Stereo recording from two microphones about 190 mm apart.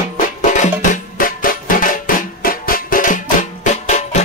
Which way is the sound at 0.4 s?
40° left (ahead or behind).